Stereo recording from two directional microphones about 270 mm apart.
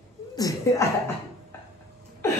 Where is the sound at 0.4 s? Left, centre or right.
Centre.